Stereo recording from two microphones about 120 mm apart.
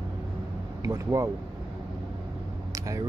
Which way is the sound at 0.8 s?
30° right (ahead or behind).